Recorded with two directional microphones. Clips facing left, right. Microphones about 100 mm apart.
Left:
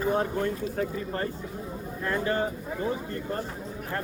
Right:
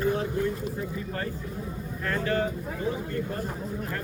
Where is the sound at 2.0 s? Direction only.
20° left (ahead or behind).